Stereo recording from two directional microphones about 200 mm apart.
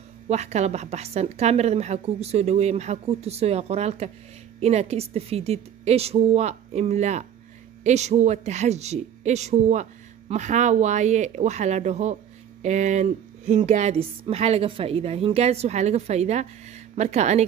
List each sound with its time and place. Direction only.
0.3 s a woman's voice: 35° right (ahead or behind)